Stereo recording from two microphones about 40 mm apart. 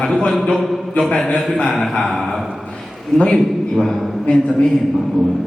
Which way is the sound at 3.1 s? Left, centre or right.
Left.